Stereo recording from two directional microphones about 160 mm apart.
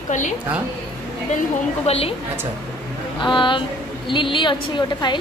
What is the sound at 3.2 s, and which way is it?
A woman's voice, 30° left (ahead or behind).